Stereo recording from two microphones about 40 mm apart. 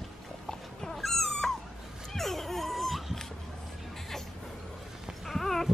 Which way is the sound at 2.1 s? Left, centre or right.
Centre.